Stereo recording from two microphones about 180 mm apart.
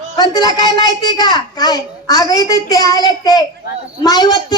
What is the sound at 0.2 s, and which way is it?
A child's voice, 20° left (ahead or behind).